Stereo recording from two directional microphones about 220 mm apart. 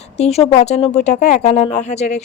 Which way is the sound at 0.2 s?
30° left (ahead or behind).